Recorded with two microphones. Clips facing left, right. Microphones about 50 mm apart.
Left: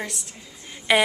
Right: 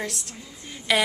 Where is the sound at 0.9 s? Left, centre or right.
Centre.